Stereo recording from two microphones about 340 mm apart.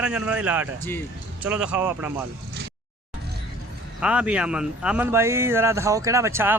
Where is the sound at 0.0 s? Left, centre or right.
Centre.